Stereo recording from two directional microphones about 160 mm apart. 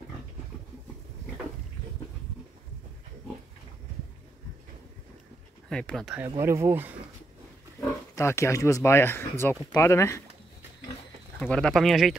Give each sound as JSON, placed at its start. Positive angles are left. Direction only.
{"t": 5.7, "sound": "speech", "side_deg": 5}
{"t": 6.3, "sound": "speech", "side_deg": -15}
{"t": 7.8, "sound": "speech", "side_deg": 15}
{"t": 11.3, "sound": "speech", "side_deg": 5}